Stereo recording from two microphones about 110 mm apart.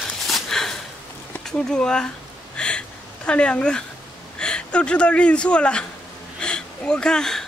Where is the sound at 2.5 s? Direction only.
10° left (ahead or behind).